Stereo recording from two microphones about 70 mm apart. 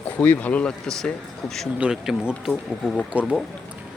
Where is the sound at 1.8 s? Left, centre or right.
Centre.